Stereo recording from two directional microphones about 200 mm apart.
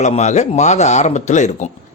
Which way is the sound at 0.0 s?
35° left (ahead or behind).